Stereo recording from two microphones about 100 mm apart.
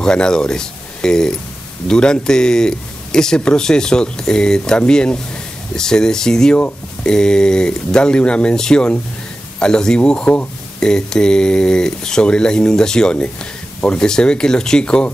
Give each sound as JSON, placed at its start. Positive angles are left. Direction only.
{"t": 0.0, "sound": "speech", "side_deg": 5}